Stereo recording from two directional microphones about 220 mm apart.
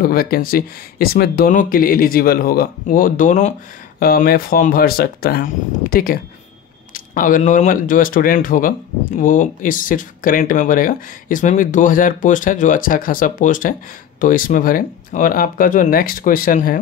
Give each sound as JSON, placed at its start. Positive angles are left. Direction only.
{"t": 0.0, "sound": "speech", "side_deg": 40}